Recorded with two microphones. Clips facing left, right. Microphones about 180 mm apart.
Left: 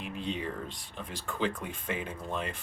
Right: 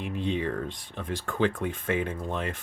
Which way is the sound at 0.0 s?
50° right (ahead or behind).